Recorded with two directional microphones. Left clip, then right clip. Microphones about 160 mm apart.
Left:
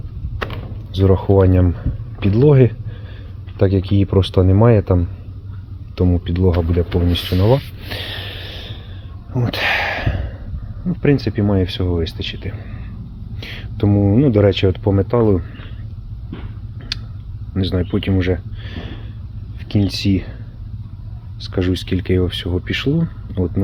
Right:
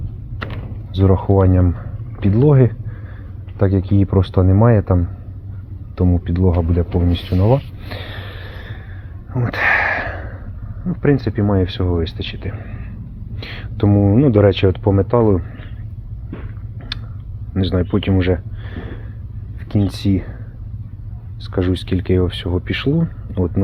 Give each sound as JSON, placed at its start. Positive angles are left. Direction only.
{"t": 0.9, "sound": "speech", "side_deg": 25}
{"t": 1.4, "sound": "speech", "side_deg": 40}
{"t": 6.1, "sound": "speech", "side_deg": 30}
{"t": 7.9, "sound": "snort", "side_deg": 35}
{"t": 9.3, "sound": "a sound", "side_deg": 35}
{"t": 10.8, "sound": "speech", "side_deg": 30}
{"t": 16.9, "sound": "tick", "side_deg": 20}
{"t": 17.5, "sound": "speech", "side_deg": 15}
{"t": 18.6, "sound": "a sound", "side_deg": 25}
{"t": 19.6, "sound": "speech", "side_deg": 25}
{"t": 21.4, "sound": "speech", "side_deg": 30}